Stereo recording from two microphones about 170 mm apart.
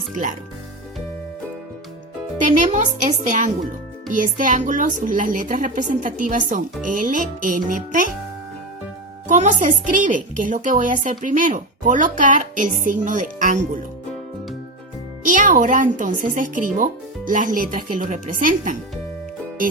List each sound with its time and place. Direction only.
0.1 s a woman's voice: 50° right (ahead or behind)
2.4 s a woman's voice: 45° right (ahead or behind)
9.2 s a woman's voice: 45° right (ahead or behind)
15.2 s a woman's voice: 50° right (ahead or behind)